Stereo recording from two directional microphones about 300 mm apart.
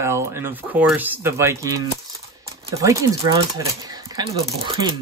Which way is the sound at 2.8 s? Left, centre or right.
Centre.